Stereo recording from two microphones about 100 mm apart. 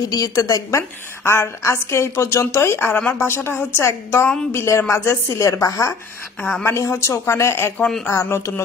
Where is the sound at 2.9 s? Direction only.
15° left (ahead or behind).